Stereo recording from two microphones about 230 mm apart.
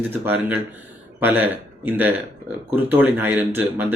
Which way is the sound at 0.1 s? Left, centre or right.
Centre.